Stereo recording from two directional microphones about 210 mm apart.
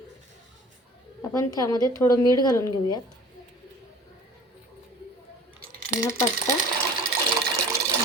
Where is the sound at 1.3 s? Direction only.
15° left (ahead or behind).